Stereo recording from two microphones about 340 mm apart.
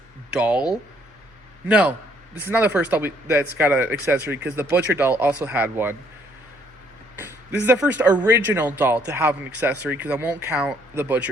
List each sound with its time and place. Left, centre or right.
0.3 s speech: centre
7.2 s speech: centre